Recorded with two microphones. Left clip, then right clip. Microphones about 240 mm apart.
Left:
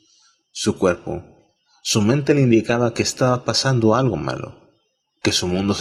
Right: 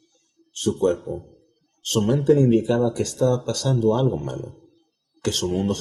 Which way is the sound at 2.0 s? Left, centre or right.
Left.